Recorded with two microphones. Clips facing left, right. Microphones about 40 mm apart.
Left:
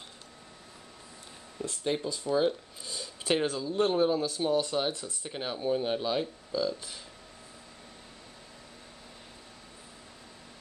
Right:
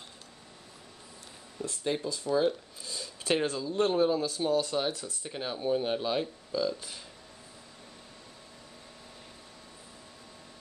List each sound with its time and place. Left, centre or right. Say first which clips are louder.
1.6 s speech: left 1 dB; centre
5.6 s speech: even; centre